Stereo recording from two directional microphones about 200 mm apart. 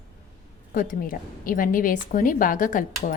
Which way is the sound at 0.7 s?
45° left (ahead or behind).